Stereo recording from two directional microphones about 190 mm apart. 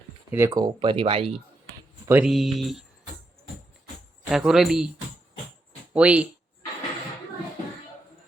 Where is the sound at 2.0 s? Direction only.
5° right (ahead or behind).